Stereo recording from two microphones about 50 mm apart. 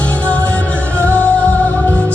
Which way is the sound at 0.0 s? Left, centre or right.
Left.